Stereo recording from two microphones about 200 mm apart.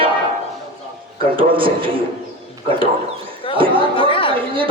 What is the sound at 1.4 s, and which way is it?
Speech, 25° right (ahead or behind).